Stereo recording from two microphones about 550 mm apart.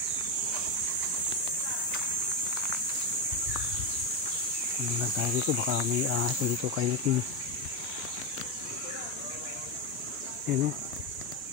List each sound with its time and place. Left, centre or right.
5.2 s speech: right
10.5 s speech: centre